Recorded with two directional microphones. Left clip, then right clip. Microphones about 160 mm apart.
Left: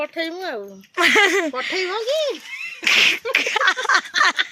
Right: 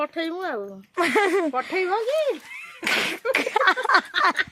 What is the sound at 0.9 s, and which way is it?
Speech, 5° right (ahead or behind).